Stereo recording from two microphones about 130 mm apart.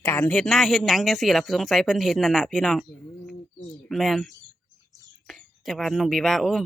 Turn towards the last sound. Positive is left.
turn(degrees=0)  # may be behind; listen again after turning